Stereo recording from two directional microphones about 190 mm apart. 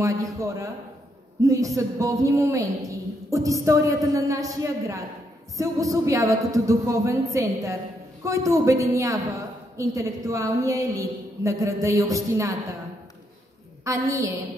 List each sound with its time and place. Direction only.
0.0 s a woman's voice: 15° right (ahead or behind)
13.8 s a woman's voice: 15° right (ahead or behind)